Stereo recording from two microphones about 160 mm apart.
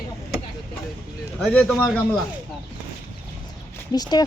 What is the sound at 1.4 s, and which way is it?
Speech, 5° left (ahead or behind).